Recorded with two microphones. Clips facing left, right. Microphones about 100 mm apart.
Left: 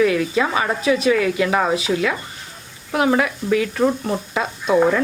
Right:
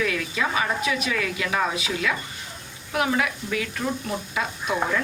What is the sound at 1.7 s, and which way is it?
Speech, 35° left (ahead or behind).